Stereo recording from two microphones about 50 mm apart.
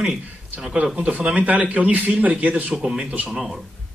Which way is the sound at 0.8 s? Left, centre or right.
Right.